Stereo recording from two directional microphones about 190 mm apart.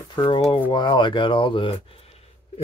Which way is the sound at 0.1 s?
25° left (ahead or behind).